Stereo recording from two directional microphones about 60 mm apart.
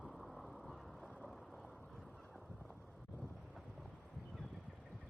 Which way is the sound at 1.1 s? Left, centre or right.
Centre.